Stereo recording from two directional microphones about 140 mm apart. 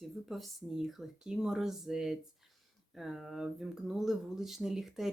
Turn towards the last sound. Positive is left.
turn(degrees=0)  # may be behind; listen again after turning